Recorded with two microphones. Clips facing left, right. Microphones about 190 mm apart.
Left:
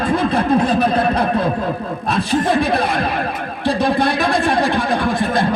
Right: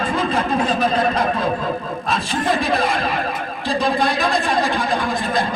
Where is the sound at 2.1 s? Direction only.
65° left (ahead or behind).